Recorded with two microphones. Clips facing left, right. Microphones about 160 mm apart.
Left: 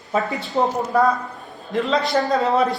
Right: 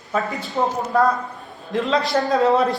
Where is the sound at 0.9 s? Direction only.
Centre (ahead or behind).